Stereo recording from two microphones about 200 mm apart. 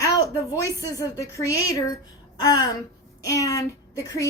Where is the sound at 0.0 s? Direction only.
15° left (ahead or behind).